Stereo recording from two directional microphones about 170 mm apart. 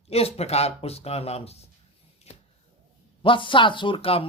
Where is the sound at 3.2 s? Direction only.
30° left (ahead or behind).